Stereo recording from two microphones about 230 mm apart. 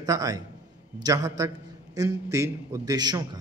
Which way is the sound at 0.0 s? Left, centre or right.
Centre.